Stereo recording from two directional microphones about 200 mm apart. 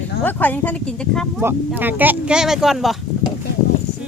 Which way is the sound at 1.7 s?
10° right (ahead or behind).